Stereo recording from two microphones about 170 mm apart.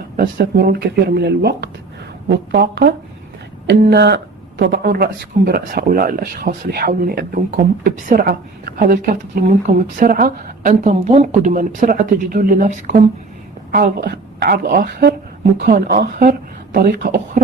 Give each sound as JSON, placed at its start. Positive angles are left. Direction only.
{"t": 0.2, "sound": "speech", "side_deg": -70}
{"t": 13.7, "sound": "a woman's voice", "side_deg": -65}